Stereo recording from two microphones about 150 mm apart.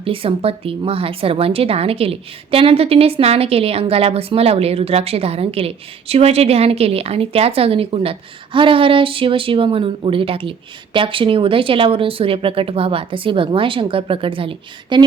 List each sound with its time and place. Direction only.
0.0 s a woman's voice: 35° right (ahead or behind)